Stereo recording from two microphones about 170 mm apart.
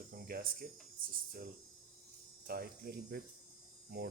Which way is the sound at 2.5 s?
65° right (ahead or behind).